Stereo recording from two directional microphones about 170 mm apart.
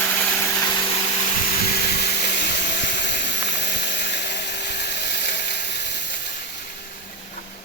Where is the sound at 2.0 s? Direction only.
80° left.